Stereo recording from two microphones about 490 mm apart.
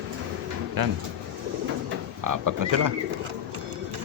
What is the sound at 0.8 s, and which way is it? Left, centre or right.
Speech, right.